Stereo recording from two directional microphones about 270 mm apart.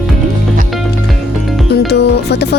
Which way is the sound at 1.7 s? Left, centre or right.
Left.